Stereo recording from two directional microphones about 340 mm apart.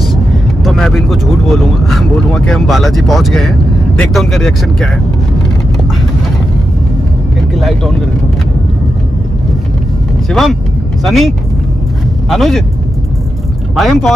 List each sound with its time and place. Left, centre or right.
0.7 s speech: centre
7.5 s speech: centre
10.3 s speech: centre
13.7 s speech: centre